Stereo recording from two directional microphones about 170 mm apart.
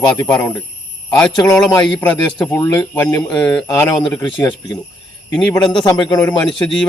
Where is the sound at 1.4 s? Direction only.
20° left (ahead or behind).